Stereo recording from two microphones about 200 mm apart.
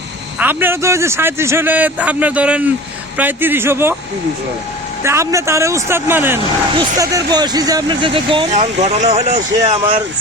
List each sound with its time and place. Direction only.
0.3 s a man's voice: 10° right (ahead or behind)
5.0 s a man's voice: 15° right (ahead or behind); by 10.0 s 30° right (ahead or behind)